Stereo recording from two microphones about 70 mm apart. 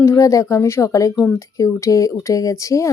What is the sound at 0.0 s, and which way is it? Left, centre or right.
Speech, left.